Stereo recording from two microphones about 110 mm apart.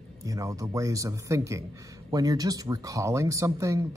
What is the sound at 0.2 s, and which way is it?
A man's voice, 30° right (ahead or behind).